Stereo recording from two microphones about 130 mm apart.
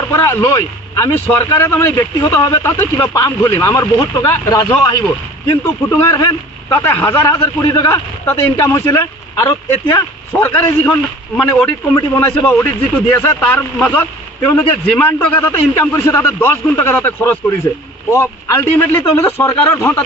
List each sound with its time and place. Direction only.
0.1 s a man's voice: 20° left (ahead or behind)
5.8 s a man's voice: 20° left (ahead or behind)
10.3 s a man's voice: 15° left (ahead or behind)